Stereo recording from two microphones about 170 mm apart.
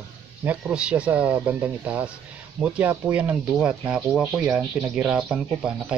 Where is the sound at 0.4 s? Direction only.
10° right (ahead or behind).